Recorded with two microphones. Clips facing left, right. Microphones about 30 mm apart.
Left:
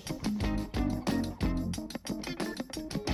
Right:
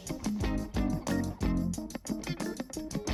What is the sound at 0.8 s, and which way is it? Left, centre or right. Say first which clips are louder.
Music: left 1 dB; left.